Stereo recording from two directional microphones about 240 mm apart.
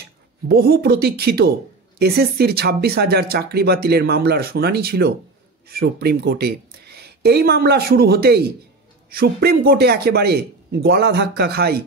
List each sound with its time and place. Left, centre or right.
0.5 s speech: right